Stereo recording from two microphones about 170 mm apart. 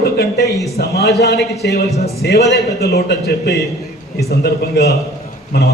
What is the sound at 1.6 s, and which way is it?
Speech, 85° left.